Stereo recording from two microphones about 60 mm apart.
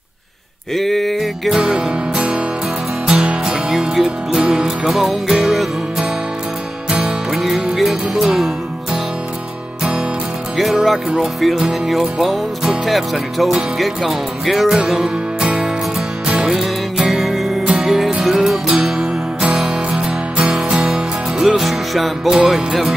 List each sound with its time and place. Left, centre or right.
0.7 s music: centre
1.5 s music: centre
7.3 s music: centre
10.6 s music: centre
14.8 s music: centre